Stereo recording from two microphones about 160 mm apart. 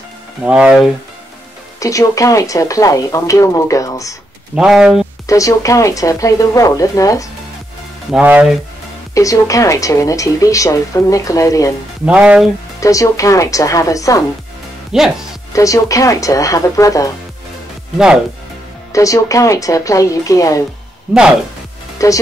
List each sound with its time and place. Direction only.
0.4 s speech: 5° right (ahead or behind)
1.8 s a woman's voice: 20° left (ahead or behind)
4.6 s speech: 5° right (ahead or behind)
5.2 s a woman's voice: 20° left (ahead or behind)
8.1 s speech: 10° right (ahead or behind)
9.1 s a woman's voice: 20° left (ahead or behind)
12.1 s speech: 5° right (ahead or behind)
12.8 s a woman's voice: 20° left (ahead or behind)
14.9 s speech: 5° right (ahead or behind)
15.5 s a woman's voice: 20° left (ahead or behind)
17.9 s speech: 5° right (ahead or behind)
18.9 s a woman's voice: 20° left (ahead or behind)
21.9 s music: 20° left (ahead or behind)